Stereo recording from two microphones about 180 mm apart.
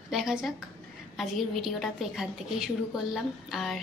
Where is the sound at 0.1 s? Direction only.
5° right (ahead or behind).